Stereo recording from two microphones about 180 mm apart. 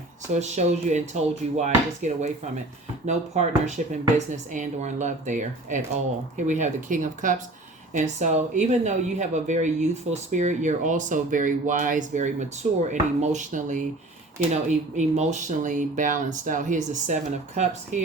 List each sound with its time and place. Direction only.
0.3 s speech: 40° right (ahead or behind)
3.3 s speech: 40° right (ahead or behind)